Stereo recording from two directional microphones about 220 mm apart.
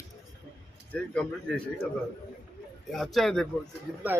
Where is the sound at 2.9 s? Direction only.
Centre (ahead or behind).